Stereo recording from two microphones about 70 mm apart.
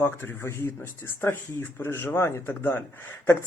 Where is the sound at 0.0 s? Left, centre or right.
Left.